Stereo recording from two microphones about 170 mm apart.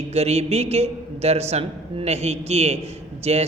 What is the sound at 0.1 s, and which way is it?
A man's voice, 40° right (ahead or behind).